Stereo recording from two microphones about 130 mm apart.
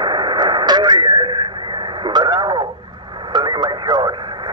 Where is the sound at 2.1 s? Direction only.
35° right (ahead or behind).